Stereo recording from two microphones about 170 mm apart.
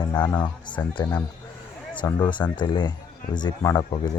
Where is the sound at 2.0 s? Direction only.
25° left (ahead or behind).